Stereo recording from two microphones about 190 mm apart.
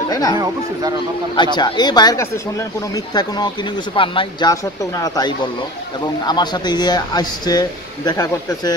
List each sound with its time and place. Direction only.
0.1 s speech: 20° left (ahead or behind)